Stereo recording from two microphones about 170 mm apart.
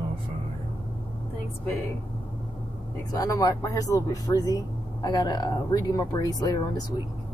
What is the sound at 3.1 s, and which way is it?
Speech, 20° left (ahead or behind).